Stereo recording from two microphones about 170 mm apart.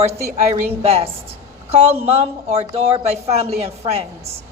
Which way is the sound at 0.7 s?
35° right (ahead or behind).